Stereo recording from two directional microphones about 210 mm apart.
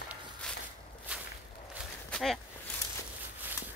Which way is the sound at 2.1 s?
Centre (ahead or behind).